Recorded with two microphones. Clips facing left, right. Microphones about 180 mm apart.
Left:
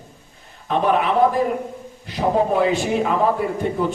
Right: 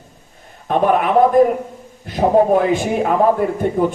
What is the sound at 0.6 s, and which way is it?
Speech, 50° right (ahead or behind).